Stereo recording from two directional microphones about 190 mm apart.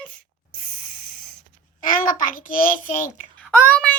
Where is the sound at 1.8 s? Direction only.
45° left (ahead or behind).